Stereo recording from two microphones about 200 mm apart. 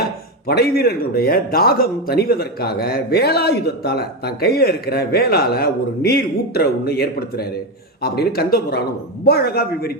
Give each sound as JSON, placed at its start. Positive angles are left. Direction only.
{"t": 0.0, "sound": "speech", "side_deg": 50}